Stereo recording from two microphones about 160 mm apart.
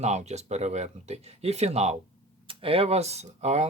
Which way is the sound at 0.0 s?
45° right (ahead or behind).